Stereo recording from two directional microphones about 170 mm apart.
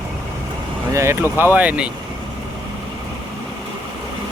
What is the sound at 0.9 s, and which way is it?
Speech, 15° right (ahead or behind).